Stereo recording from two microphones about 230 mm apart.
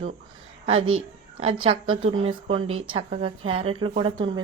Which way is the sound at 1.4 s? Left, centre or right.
Right.